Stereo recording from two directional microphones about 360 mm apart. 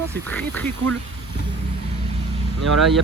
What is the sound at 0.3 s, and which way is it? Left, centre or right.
Speech, centre.